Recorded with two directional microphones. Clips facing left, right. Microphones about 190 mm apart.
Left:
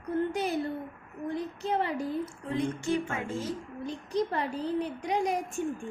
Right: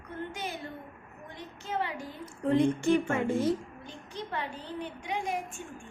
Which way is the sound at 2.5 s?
55° right (ahead or behind).